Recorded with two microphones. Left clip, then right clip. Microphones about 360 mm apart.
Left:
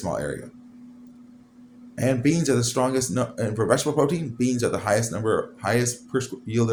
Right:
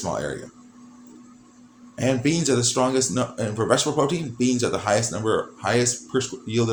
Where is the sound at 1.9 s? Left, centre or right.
Left.